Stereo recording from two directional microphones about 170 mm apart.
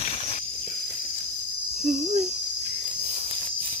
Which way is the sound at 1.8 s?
45° right (ahead or behind).